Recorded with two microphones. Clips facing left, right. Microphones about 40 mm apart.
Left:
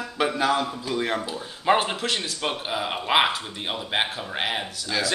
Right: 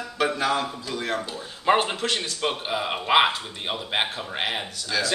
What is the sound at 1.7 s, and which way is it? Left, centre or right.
Speech, centre.